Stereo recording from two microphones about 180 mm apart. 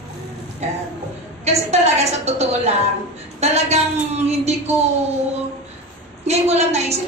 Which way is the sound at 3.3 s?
35° right (ahead or behind).